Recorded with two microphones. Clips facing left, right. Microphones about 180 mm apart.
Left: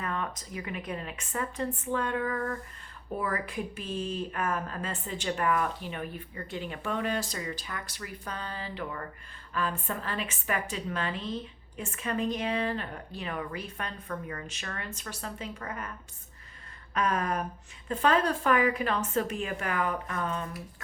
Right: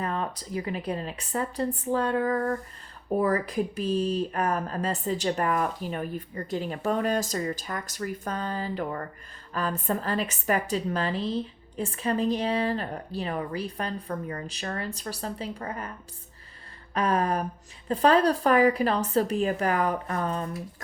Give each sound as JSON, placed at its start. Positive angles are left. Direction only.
{"t": 0.0, "sound": "speech", "side_deg": -35}
{"t": 16.9, "sound": "speech", "side_deg": -35}